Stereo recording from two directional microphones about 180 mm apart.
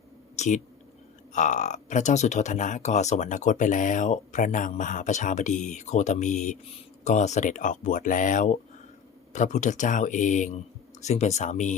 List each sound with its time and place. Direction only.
0.3 s speech: 40° left (ahead or behind)